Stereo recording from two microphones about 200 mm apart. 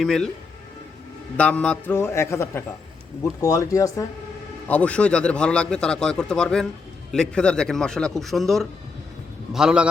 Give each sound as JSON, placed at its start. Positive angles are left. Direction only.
{"t": 0.0, "sound": "a man's voice", "side_deg": 0}
{"t": 1.4, "sound": "a man's voice", "side_deg": 5}